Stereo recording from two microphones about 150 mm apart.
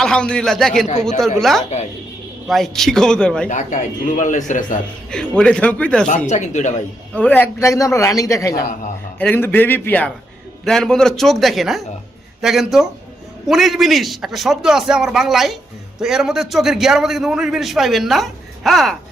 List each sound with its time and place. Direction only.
0.0 s a man's voice: 5° left (ahead or behind)
3.5 s a man's voice: 60° left (ahead or behind)
5.1 s a man's voice: 5° left (ahead or behind)
6.2 s speech: 50° left (ahead or behind)
7.1 s a man's voice: 10° left (ahead or behind)